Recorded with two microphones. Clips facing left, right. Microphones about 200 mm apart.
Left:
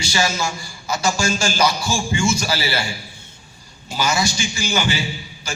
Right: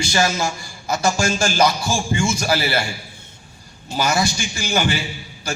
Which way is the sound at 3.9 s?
55° right (ahead or behind).